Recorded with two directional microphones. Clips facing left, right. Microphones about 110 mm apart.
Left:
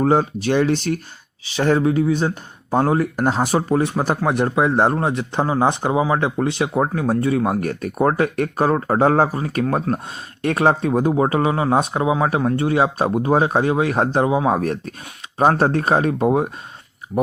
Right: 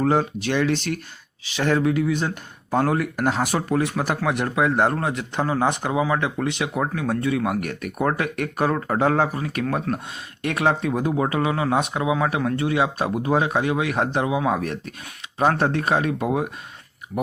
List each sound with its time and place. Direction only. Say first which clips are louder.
0.0 s speech: left 3 dB; 35° left (ahead or behind)